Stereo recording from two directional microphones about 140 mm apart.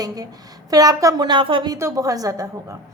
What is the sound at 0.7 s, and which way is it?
A woman's voice, 25° right (ahead or behind).